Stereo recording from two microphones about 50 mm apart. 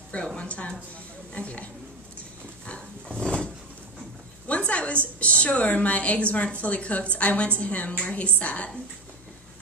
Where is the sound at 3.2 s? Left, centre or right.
Centre.